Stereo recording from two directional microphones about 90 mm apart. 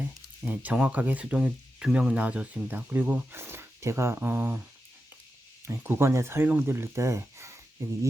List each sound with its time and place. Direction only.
0.4 s speech: 15° right (ahead or behind)
5.6 s speech: 25° right (ahead or behind)